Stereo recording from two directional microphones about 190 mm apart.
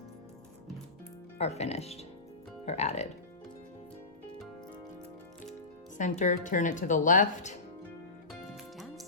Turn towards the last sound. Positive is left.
turn(degrees=40)  # may be behind; listen again after turning